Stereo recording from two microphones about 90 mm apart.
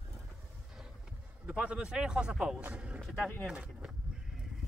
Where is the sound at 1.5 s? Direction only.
10° right (ahead or behind).